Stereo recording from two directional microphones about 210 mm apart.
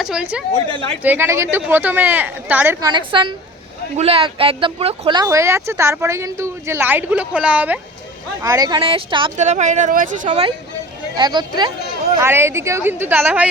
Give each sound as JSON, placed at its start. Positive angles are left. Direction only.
{"t": 0.0, "sound": "a woman's voice", "side_deg": -5}
{"t": 9.4, "sound": "speech", "side_deg": -35}
{"t": 11.2, "sound": "speech", "side_deg": -20}